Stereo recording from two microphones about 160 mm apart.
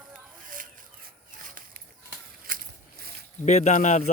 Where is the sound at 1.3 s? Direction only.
60° right (ahead or behind).